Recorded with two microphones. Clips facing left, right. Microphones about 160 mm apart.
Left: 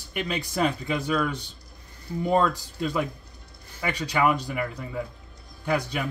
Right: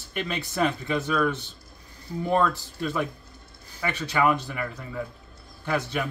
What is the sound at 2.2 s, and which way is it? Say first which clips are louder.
Speech: left 1 dB; 15° left (ahead or behind).